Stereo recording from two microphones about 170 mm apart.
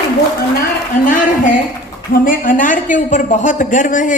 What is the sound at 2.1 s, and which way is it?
A man's voice, 55° left (ahead or behind).